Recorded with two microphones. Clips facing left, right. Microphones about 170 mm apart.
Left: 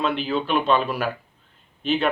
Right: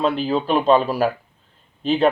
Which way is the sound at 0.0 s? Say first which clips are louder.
Right 4 dB; 35° right (ahead or behind).